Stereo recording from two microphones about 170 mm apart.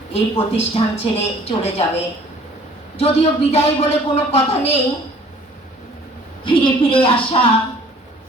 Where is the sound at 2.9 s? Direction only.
35° left (ahead or behind).